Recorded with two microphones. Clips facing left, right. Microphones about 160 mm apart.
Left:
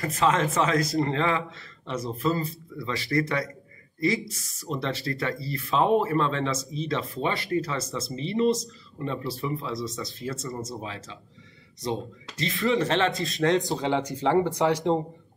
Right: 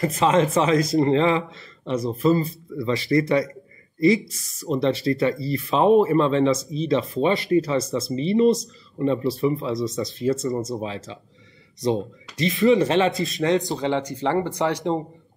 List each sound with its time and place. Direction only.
0.0 s a man's voice: 20° right (ahead or behind)
4.6 s a man's voice: 20° right (ahead or behind); by 15.0 s centre (ahead or behind)